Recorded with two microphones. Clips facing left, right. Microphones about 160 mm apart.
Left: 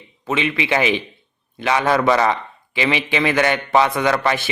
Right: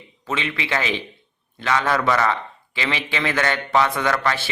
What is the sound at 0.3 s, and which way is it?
A man's voice, 15° left (ahead or behind).